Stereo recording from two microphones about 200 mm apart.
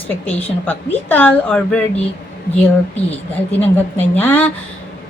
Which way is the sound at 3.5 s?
10° left (ahead or behind).